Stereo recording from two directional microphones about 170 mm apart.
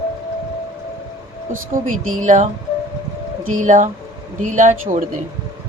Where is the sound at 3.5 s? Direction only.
50° right (ahead or behind).